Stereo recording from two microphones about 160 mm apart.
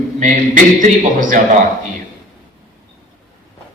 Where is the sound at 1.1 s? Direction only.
55° right (ahead or behind).